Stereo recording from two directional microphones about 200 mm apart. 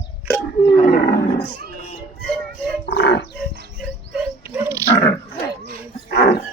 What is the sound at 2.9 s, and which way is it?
Wild animals, 55° left (ahead or behind).